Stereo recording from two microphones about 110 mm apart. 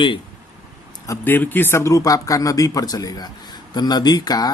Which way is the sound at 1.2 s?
20° left (ahead or behind).